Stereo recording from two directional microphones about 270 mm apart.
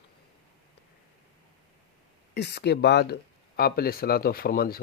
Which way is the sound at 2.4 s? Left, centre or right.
Left.